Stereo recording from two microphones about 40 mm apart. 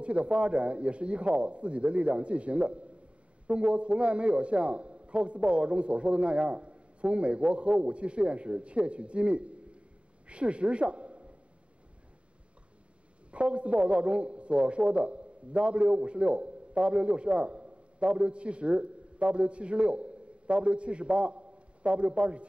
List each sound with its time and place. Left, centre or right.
0.0 s a man's voice: right
13.3 s a man's voice: right